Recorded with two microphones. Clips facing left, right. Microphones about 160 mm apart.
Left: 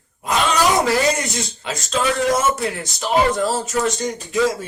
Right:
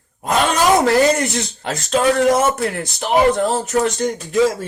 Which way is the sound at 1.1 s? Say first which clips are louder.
Right 4 dB; 60° right (ahead or behind).